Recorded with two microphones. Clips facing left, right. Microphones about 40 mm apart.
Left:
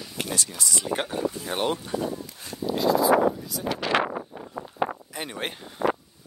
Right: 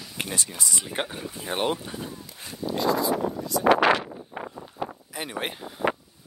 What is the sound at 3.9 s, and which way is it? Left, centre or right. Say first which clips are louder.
Wind noise: left 3 dB; left.